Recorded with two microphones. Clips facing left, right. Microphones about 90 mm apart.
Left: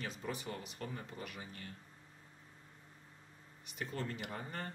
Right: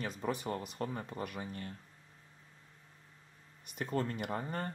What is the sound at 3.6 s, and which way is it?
Speech, 45° right (ahead or behind).